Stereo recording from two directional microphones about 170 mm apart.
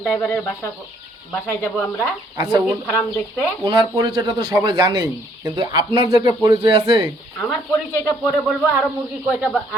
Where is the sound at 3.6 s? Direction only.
25° right (ahead or behind).